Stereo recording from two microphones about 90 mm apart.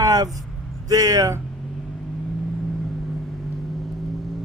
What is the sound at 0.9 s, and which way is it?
Speech, 45° right (ahead or behind).